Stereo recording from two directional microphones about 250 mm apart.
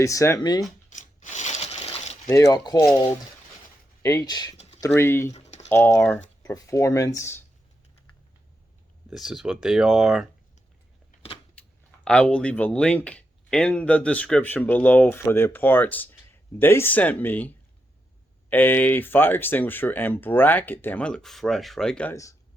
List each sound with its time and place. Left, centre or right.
0.0 s speech: centre
0.9 s crushing: left
2.2 s speech: centre
5.3 s typing: left
5.6 s speech: centre
9.0 s speech: centre
12.0 s speech: centre
18.5 s speech: centre